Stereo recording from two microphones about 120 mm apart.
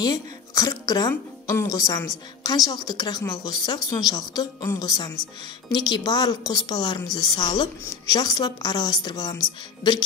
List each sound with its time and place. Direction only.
0.0 s speech: 30° left (ahead or behind)